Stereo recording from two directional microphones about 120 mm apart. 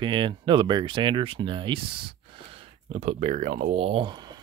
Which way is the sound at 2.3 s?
50° right (ahead or behind).